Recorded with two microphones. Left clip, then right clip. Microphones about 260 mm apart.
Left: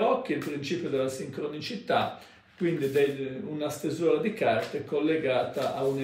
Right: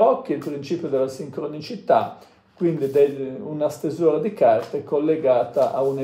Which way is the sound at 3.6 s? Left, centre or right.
Centre.